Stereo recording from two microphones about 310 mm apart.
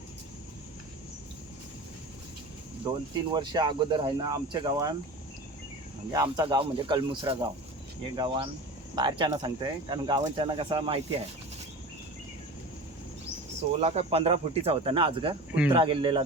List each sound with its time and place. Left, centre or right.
2.8 s speech: centre
6.1 s speech: centre
13.8 s speech: centre